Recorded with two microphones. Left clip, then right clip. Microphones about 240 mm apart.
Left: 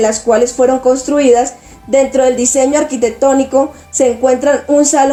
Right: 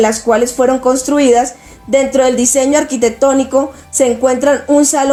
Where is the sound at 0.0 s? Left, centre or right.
Right.